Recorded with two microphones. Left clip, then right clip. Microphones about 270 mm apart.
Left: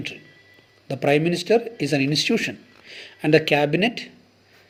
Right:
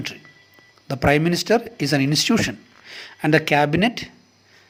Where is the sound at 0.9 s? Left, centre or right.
Right.